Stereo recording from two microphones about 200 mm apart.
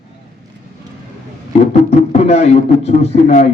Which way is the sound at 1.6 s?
30° left (ahead or behind).